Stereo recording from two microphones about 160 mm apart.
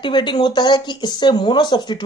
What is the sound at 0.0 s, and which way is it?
Speech, 30° left (ahead or behind).